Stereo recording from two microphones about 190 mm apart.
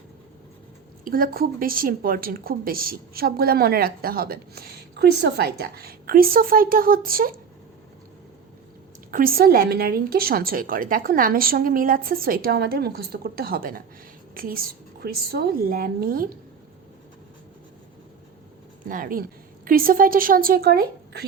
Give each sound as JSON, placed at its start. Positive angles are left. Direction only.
{"t": 1.0, "sound": "a woman's voice", "side_deg": -50}
{"t": 9.1, "sound": "a woman's voice", "side_deg": -50}
{"t": 18.9, "sound": "a woman's voice", "side_deg": -45}